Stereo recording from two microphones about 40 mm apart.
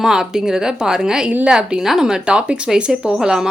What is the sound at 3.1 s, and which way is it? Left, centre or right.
Speech, centre.